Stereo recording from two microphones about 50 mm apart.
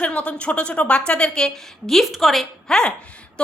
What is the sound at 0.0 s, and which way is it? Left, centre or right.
A woman's voice, left.